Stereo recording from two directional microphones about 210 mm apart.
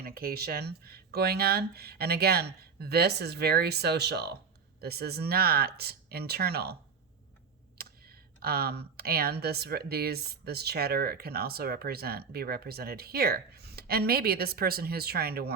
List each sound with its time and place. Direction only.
0.0 s speech: 45° right (ahead or behind)
7.8 s speech: 45° right (ahead or behind)